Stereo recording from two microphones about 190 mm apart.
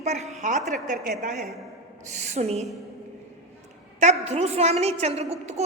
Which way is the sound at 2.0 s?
35° right (ahead or behind).